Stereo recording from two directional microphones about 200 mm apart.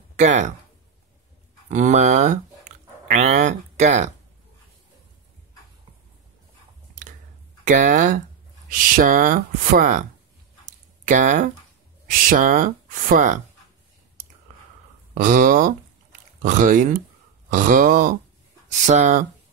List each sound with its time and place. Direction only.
0.1 s speech: 35° right (ahead or behind)
1.7 s speech: 35° right (ahead or behind)
7.6 s speech: 40° right (ahead or behind)
11.1 s speech: 40° right (ahead or behind)
15.1 s speech: 40° right (ahead or behind)